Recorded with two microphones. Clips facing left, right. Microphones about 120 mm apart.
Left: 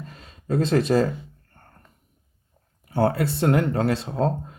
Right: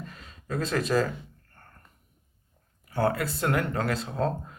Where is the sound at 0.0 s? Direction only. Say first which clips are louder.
Left 2 dB; 35° left (ahead or behind).